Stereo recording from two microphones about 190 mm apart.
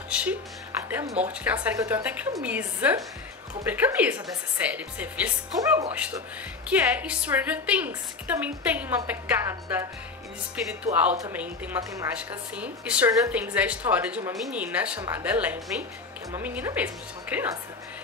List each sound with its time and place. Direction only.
0.1 s a woman's voice: 5° right (ahead or behind)
5.6 s a woman's voice: 15° right (ahead or behind)
6.7 s a woman's voice: 5° right (ahead or behind)